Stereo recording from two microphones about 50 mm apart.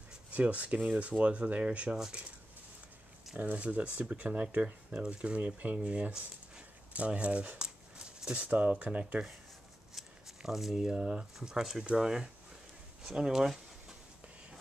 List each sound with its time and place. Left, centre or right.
0.3 s speech: right
3.3 s speech: right
9.9 s a sound: centre
11.0 s speech: right
11.3 s speech: centre